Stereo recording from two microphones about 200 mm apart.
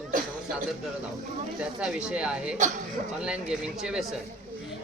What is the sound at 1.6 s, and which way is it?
Speech, 5° right (ahead or behind).